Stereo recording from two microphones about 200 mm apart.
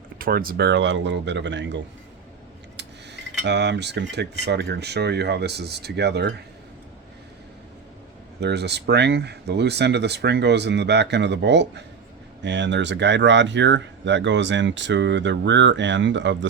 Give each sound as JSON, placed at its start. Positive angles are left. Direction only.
{"t": 0.2, "sound": "speech", "side_deg": -45}
{"t": 3.4, "sound": "speech", "side_deg": -60}
{"t": 8.4, "sound": "speech", "side_deg": -55}